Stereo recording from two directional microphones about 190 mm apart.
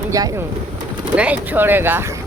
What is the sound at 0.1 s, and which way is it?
Speech, 20° right (ahead or behind).